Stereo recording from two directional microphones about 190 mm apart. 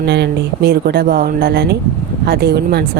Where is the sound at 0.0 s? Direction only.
60° right (ahead or behind).